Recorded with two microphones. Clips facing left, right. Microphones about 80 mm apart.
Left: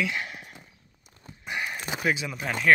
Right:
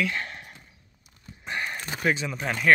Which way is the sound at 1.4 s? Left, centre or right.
Centre.